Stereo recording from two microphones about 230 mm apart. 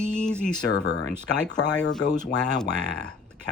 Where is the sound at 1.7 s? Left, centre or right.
Centre.